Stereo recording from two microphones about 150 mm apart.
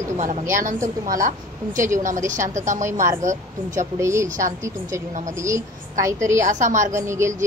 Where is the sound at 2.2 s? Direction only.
55° right (ahead or behind).